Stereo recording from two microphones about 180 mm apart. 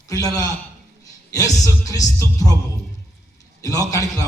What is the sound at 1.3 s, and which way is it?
Music, 20° left (ahead or behind).